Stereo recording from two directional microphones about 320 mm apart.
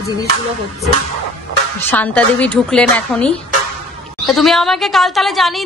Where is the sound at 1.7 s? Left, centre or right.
Centre.